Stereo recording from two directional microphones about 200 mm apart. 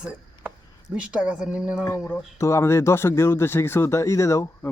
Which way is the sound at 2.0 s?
10° left (ahead or behind).